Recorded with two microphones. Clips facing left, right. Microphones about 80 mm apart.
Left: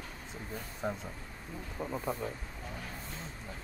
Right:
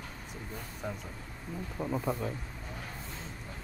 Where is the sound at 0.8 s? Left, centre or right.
Left.